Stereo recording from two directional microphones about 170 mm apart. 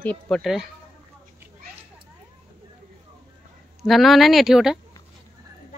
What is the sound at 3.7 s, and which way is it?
Speech, centre (ahead or behind).